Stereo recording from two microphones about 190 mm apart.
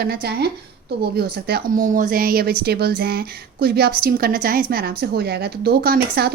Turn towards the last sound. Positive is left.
turn(degrees=-55)  # may be behind; listen again after turning